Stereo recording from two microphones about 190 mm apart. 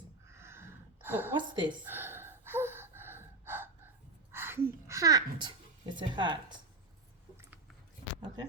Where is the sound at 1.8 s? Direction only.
10° right (ahead or behind).